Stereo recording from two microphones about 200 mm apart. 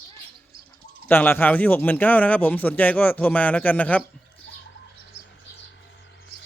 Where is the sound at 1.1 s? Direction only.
10° left (ahead or behind).